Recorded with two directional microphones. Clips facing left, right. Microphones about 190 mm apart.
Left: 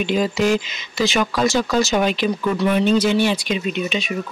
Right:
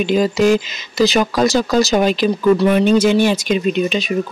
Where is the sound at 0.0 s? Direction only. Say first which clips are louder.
Right 5 dB; 40° right (ahead or behind).